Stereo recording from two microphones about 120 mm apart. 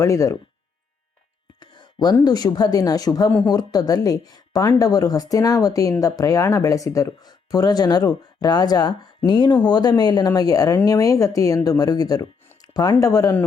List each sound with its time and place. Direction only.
0.0 s speech: 25° left (ahead or behind)
1.5 s a sound: 35° left (ahead or behind)
2.2 s speech: 35° left (ahead or behind)
3.2 s speech: 10° left (ahead or behind)
3.5 s speech: 35° left (ahead or behind)